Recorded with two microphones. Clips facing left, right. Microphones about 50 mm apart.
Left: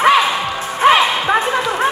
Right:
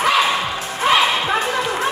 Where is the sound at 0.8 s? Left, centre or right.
Left.